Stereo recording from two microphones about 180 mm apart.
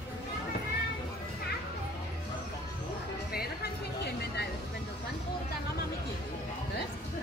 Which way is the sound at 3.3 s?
65° left (ahead or behind).